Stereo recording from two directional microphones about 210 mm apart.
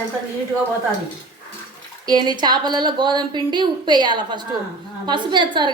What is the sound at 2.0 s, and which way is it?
A woman's voice, 20° right (ahead or behind).